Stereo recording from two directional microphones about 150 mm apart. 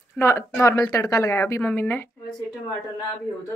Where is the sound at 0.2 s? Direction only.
20° left (ahead or behind).